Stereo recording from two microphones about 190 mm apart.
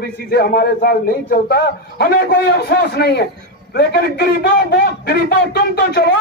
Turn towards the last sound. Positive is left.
turn(degrees=60)  # may be behind; listen again after turning